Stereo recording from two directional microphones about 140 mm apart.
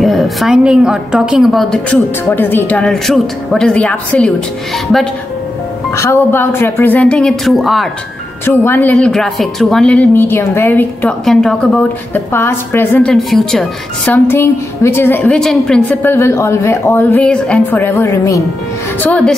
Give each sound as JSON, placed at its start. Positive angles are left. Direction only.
{"t": 0.0, "sound": "a woman's voice", "side_deg": 0}
{"t": 5.9, "sound": "a woman's voice", "side_deg": 20}
{"t": 8.5, "sound": "a woman's voice", "side_deg": 15}
{"t": 8.9, "sound": "a woman's voice", "side_deg": 5}
{"t": 14.1, "sound": "a woman's voice", "side_deg": 15}
{"t": 15.3, "sound": "a woman's voice", "side_deg": 5}
{"t": 18.9, "sound": "a woman's voice", "side_deg": 10}